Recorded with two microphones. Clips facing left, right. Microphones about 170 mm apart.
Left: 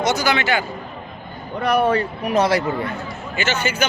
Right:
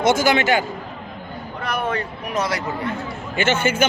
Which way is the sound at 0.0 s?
50° right (ahead or behind).